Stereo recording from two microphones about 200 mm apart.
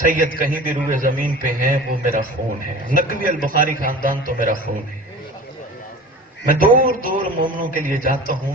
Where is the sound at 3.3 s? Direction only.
45° right (ahead or behind).